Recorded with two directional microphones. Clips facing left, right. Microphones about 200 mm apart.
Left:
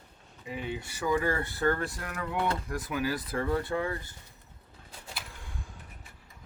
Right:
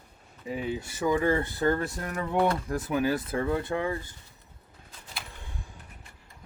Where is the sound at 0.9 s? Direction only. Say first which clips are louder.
Right 4 dB; 20° right (ahead or behind).